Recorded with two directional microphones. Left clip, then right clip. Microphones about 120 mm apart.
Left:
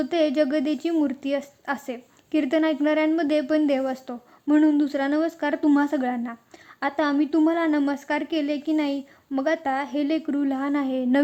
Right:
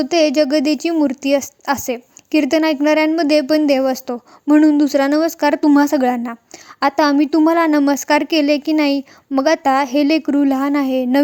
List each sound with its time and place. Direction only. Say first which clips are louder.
0.0 s a woman's voice: right 8 dB; 35° right (ahead or behind)